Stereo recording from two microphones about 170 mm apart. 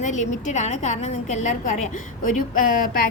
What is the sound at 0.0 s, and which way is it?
A woman's voice, 45° left (ahead or behind).